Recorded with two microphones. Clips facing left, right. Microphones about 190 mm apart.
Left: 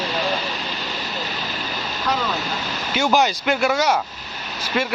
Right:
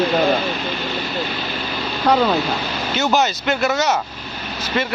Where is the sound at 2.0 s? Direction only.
65° right (ahead or behind).